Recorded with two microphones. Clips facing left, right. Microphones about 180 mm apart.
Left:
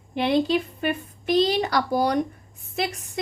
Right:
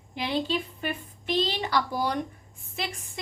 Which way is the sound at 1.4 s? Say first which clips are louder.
Left 6 dB; 45° left (ahead or behind).